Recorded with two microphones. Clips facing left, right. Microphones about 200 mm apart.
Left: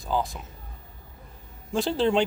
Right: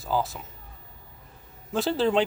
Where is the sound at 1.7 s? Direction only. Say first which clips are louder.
Even; centre (ahead or behind).